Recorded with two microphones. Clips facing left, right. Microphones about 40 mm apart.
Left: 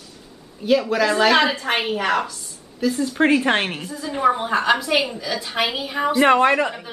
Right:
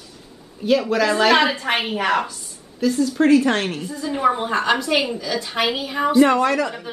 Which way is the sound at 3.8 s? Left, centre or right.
Centre.